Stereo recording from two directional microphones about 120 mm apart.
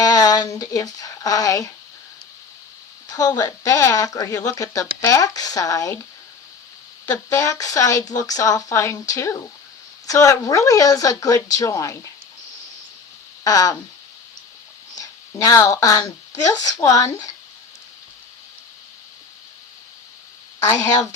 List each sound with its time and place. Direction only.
0.0 s speech: 30° left (ahead or behind)
3.2 s speech: 30° left (ahead or behind)
7.0 s speech: 20° left (ahead or behind)
13.4 s speech: 30° left (ahead or behind)
14.9 s speech: 30° left (ahead or behind)
20.6 s speech: 25° left (ahead or behind)